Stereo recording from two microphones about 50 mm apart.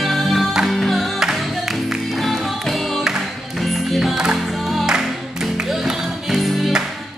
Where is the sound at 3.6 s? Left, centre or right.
Centre.